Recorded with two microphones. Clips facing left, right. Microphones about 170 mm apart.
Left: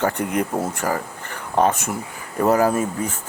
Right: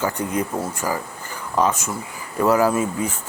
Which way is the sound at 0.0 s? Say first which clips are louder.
Left 2 dB; 60° left (ahead or behind).